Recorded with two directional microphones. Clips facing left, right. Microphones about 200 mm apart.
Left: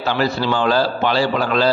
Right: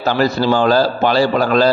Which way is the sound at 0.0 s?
40° right (ahead or behind).